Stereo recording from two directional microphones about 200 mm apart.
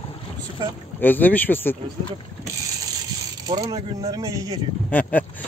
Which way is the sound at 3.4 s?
20° right (ahead or behind).